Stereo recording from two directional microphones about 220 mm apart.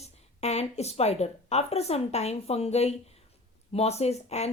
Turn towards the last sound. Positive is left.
turn(degrees=30)  # may be behind; listen again after turning